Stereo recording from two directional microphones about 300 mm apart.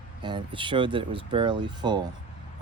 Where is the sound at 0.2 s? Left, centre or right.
Centre.